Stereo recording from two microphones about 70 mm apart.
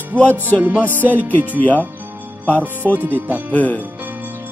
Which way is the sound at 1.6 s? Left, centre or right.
Left.